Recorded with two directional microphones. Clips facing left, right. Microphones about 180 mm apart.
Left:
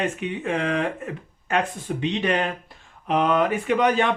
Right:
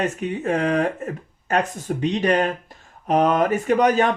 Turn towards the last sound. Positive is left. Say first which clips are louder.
# right 3 dB
turn(degrees=-40)  # may be behind; listen again after turning